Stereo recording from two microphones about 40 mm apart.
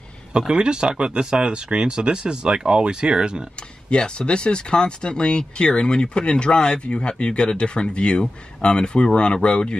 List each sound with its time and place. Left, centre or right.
0.3 s speech: right
3.9 s speech: left